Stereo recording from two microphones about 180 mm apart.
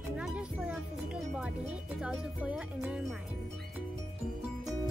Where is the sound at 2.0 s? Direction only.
5° right (ahead or behind).